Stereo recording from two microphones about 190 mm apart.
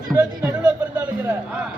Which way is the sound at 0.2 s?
10° right (ahead or behind).